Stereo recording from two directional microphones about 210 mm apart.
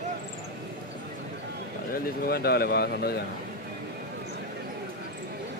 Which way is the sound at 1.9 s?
50° left (ahead or behind).